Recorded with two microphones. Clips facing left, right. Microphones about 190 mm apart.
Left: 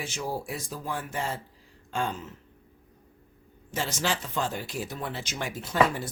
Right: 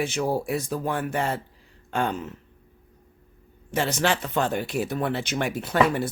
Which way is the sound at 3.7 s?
65° right (ahead or behind).